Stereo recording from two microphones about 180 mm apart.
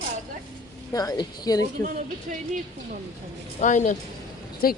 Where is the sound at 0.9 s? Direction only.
20° left (ahead or behind).